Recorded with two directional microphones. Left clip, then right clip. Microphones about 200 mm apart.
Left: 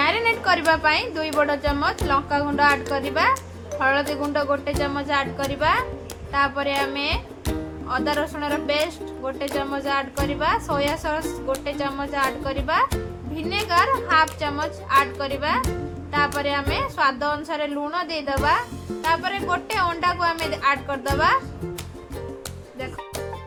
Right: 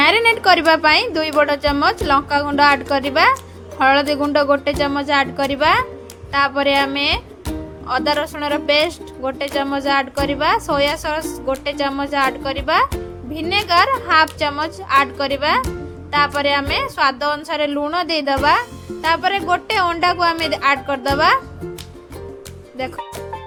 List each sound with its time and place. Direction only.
0.0 s a sound: 40° right (ahead or behind)
1.4 s speech: 35° right (ahead or behind)
23.0 s music: centre (ahead or behind)